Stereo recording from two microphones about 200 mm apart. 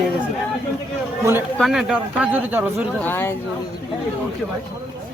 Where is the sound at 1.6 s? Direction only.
Centre (ahead or behind).